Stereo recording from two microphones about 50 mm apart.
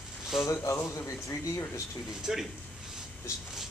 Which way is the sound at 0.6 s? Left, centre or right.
Left.